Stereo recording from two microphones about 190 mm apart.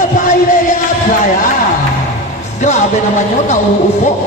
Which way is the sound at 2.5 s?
40° left (ahead or behind).